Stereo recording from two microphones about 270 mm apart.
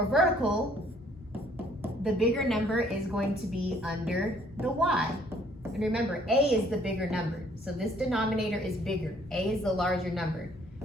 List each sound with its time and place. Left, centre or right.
0.1 s a woman's voice: centre
1.8 s a woman's voice: centre